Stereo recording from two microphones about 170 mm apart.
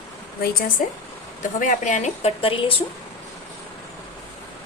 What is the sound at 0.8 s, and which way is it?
A woman's voice, 50° left (ahead or behind).